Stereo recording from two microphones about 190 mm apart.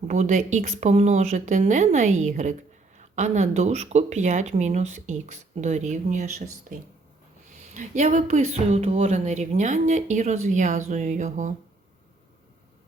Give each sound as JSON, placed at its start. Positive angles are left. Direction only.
{"t": 0.1, "sound": "speech", "side_deg": -40}